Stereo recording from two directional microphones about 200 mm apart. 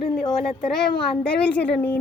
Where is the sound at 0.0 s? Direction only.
25° left (ahead or behind).